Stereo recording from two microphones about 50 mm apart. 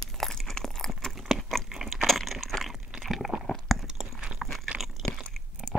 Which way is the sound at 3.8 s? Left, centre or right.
Centre.